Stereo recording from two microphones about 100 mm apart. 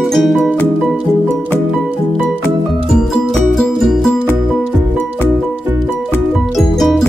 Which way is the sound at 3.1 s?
10° left (ahead or behind).